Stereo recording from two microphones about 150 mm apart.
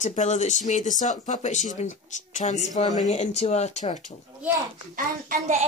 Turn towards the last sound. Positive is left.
turn(degrees=-55)  # may be behind; listen again after turning